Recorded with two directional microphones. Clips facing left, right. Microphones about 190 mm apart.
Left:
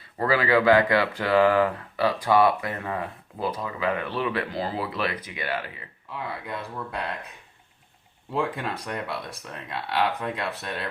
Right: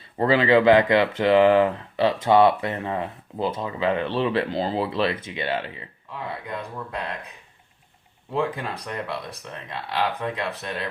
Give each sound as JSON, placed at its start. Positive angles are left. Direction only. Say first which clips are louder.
{"t": 0.0, "sound": "speech", "louder": "right 4 dB", "side_deg": -25}
{"t": 8.3, "sound": "speech", "louder": "right 2 dB", "side_deg": 0}